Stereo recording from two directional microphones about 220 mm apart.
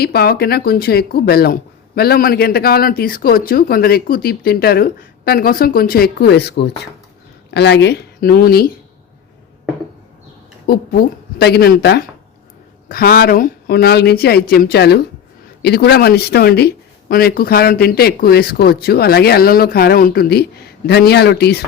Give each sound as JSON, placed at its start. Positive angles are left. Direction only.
{"t": 0.0, "sound": "speech", "side_deg": 45}
{"t": 10.7, "sound": "speech", "side_deg": 45}